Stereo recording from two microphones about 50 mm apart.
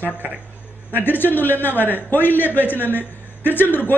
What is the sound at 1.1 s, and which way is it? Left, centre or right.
A man's voice, left.